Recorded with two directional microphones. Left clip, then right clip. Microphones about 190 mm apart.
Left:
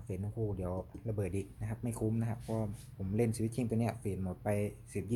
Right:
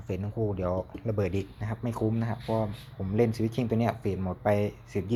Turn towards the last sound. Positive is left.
turn(degrees=5)  # may be behind; listen again after turning